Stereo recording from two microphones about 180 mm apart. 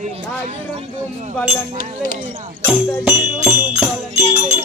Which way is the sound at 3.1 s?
10° right (ahead or behind).